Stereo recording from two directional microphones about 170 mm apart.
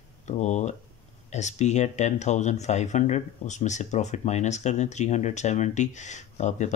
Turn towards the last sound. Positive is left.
turn(degrees=45)  # may be behind; listen again after turning